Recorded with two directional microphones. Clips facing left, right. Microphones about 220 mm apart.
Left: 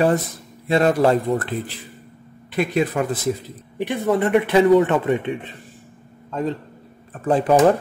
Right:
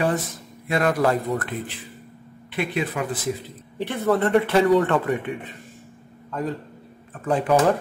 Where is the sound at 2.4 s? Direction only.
45° left (ahead or behind).